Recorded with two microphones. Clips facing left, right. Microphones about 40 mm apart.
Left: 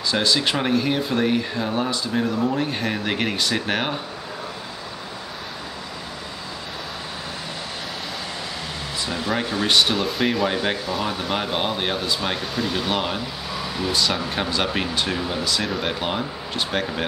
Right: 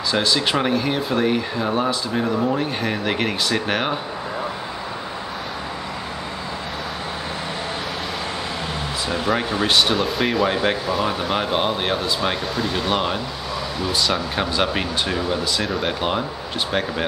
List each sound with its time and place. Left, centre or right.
0.1 s speech: centre
9.1 s speech: centre
9.8 s speech: centre